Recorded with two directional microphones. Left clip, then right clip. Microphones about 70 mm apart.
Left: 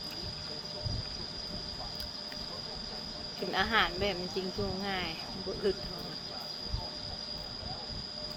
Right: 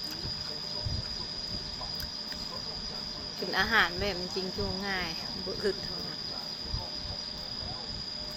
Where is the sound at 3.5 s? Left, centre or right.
Left.